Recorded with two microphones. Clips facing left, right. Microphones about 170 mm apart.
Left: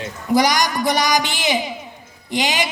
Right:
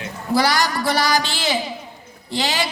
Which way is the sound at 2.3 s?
20° left (ahead or behind).